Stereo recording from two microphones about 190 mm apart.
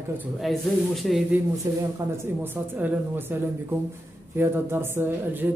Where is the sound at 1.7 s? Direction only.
20° right (ahead or behind).